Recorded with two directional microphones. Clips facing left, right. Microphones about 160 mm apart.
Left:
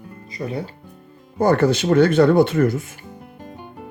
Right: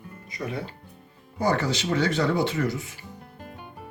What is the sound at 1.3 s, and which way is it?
Speech, 55° left (ahead or behind).